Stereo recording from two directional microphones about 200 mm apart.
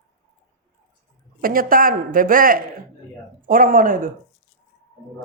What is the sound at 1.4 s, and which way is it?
A man's voice, 45° right (ahead or behind).